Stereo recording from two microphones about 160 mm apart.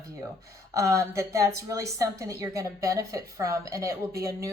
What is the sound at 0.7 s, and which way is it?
A woman's voice, 20° right (ahead or behind).